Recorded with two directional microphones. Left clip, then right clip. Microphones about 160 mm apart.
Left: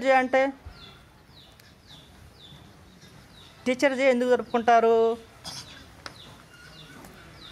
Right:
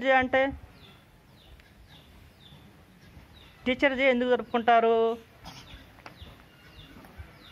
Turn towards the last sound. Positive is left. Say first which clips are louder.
# left 5 dB
turn(degrees=0)  # may be behind; listen again after turning